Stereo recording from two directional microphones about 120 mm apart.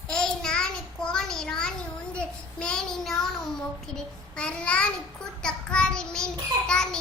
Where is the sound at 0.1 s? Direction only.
5° left (ahead or behind).